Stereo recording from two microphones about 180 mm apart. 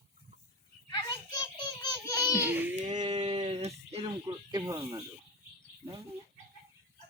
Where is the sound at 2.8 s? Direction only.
40° right (ahead or behind); by 5.0 s 20° right (ahead or behind).